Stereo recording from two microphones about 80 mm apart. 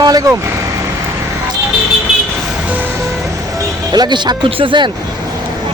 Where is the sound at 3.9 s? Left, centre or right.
Right.